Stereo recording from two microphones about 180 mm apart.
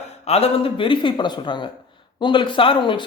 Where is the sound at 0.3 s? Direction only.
35° left (ahead or behind).